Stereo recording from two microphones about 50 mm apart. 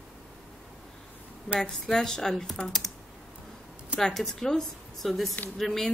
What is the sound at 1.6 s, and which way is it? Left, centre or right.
Speech, centre.